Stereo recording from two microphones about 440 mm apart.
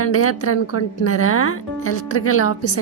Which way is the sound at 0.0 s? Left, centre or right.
Left.